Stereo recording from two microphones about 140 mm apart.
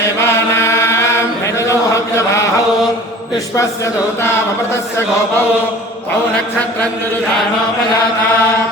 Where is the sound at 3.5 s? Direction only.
20° left (ahead or behind).